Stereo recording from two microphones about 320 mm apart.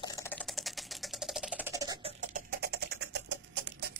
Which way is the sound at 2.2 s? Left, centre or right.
Right.